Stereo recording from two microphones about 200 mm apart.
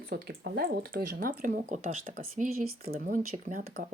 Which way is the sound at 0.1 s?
55° right (ahead or behind).